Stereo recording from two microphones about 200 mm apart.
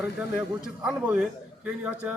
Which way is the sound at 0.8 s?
5° right (ahead or behind).